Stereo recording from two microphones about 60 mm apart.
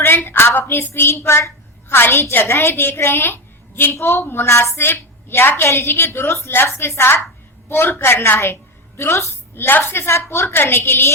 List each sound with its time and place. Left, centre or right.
0.3 s a woman's voice: left
6.5 s a woman's voice: left
9.6 s a woman's voice: left